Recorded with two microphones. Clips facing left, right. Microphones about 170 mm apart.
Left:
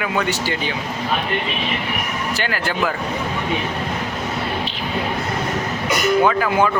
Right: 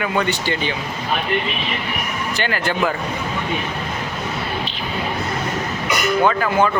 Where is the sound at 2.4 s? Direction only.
5° left (ahead or behind).